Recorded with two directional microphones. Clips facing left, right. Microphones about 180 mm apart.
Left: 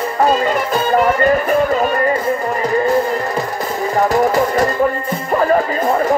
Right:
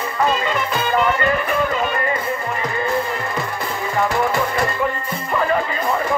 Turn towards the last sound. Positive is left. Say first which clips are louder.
# left 5 dB
turn(degrees=40)  # may be behind; listen again after turning